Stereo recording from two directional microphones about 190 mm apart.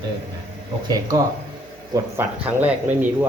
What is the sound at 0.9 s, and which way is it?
Speech, 20° right (ahead or behind).